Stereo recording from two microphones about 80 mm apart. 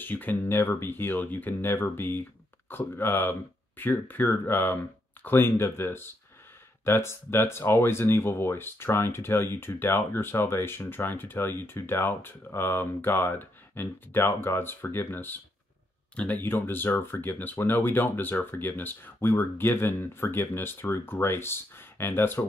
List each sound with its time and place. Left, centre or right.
0.0 s speech: left